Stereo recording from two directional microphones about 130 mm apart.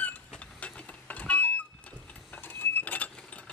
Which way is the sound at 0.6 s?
10° left (ahead or behind).